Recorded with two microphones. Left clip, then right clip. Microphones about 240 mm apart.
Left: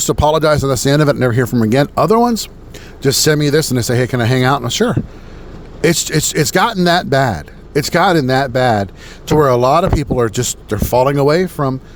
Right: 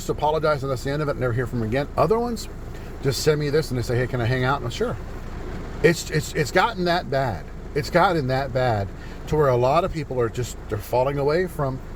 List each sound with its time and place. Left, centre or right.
0.0 s speech: left